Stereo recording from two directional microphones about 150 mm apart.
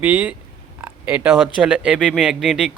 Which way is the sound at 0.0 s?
10° right (ahead or behind).